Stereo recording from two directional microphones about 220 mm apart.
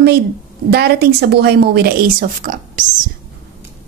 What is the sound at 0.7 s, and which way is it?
A woman's voice, 45° right (ahead or behind).